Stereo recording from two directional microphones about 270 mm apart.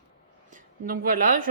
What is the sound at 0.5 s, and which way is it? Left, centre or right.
Speech, right.